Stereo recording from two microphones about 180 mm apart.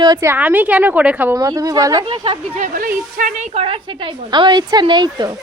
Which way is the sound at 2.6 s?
50° right (ahead or behind).